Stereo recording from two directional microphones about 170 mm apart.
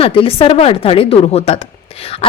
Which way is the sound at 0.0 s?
30° left (ahead or behind).